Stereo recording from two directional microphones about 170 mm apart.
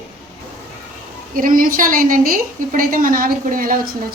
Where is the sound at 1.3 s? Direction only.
55° right (ahead or behind).